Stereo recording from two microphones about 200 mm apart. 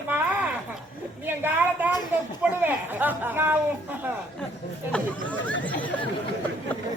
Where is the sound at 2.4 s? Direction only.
10° right (ahead or behind).